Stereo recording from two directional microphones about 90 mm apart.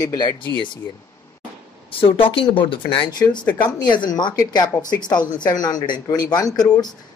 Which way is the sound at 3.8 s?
55° left (ahead or behind).